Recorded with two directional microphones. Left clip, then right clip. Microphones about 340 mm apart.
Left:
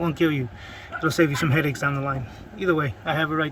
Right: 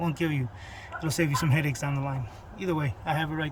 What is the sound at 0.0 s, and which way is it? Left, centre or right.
A man's voice, centre.